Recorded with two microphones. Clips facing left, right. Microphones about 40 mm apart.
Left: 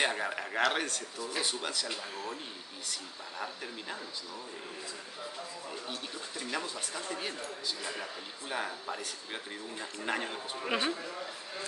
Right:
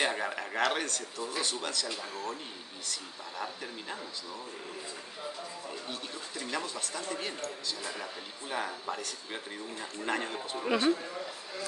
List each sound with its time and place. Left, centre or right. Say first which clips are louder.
0.0 s a man's voice: even; centre
3.4 s a man's voice: right 1 dB; centre
6.5 s a man's voice: right 1 dB; centre
10.7 s speech: right 5 dB; centre